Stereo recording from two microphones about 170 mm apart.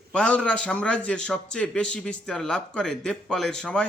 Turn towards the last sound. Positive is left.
turn(degrees=5)  # may be behind; listen again after turning